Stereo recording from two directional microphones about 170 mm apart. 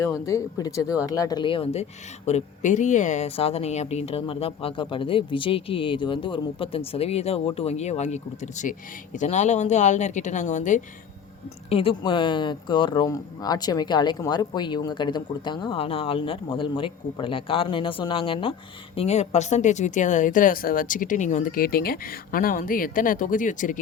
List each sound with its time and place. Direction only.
0.0 s speech: 20° left (ahead or behind); by 10.8 s 45° left (ahead or behind)
11.7 s speech: 30° left (ahead or behind); by 23.8 s 50° left (ahead or behind)